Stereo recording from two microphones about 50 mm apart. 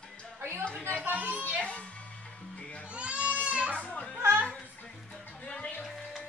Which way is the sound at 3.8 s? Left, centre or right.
Left.